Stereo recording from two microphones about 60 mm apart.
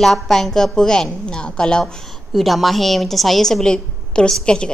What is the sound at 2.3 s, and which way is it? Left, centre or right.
A woman's voice, centre.